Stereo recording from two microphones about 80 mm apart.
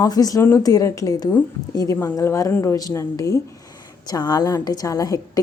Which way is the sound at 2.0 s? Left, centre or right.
Left.